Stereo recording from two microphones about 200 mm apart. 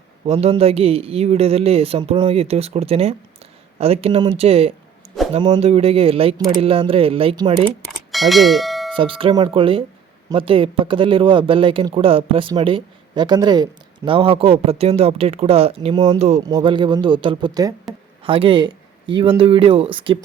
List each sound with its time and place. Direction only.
0.3 s speech: 30° right (ahead or behind)
8.1 s speech: centre (ahead or behind)
9.0 s speech: 25° right (ahead or behind)
16.4 s speech: 20° right (ahead or behind)